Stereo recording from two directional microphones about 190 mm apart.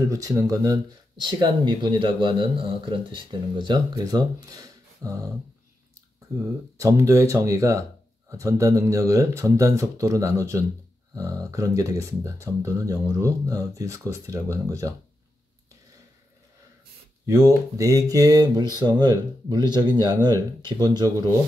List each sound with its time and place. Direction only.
0.1 s speech: 20° right (ahead or behind)
6.3 s speech: 15° right (ahead or behind)
17.3 s speech: 15° right (ahead or behind)